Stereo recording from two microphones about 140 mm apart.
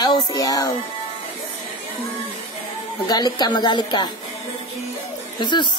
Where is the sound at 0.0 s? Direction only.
30° left (ahead or behind).